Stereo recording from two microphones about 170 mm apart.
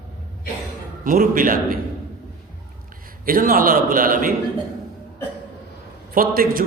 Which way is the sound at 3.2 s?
55° right (ahead or behind).